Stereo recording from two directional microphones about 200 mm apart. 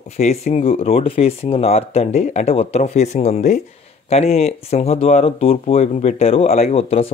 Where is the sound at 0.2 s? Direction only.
35° left (ahead or behind).